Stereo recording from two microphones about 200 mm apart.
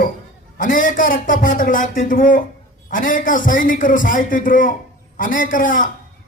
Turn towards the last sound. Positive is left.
turn(degrees=40)  # may be behind; listen again after turning